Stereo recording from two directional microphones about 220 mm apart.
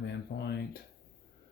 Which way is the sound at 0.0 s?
50° left (ahead or behind).